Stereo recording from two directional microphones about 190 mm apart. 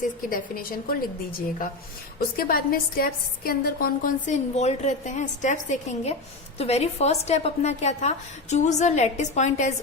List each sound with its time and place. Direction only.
0.3 s a woman's voice: 50° left (ahead or behind)
2.1 s a woman's voice: 50° left (ahead or behind)